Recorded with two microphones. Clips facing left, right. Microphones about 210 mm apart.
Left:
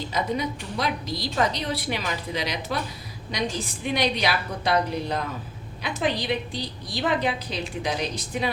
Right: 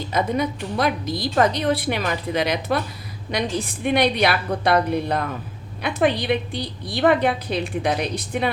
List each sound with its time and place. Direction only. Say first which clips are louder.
0.1 s a woman's voice: right 6 dB; 55° right (ahead or behind)